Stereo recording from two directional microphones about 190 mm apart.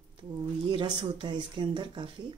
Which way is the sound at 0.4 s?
25° right (ahead or behind).